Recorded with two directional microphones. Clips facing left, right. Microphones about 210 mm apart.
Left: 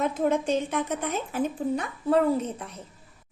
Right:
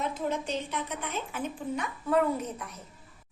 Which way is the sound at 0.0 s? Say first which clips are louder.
Left 7 dB; 50° left (ahead or behind).